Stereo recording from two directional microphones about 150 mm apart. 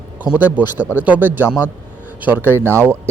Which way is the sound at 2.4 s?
15° left (ahead or behind).